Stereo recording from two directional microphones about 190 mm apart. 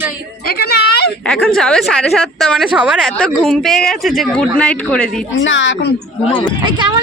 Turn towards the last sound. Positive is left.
turn(degrees=-25)  # may be behind; listen again after turning